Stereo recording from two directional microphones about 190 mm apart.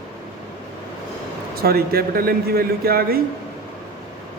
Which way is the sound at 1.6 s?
55° right (ahead or behind).